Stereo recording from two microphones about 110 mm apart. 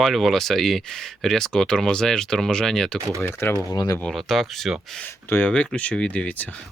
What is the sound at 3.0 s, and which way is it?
Speech, 30° right (ahead or behind).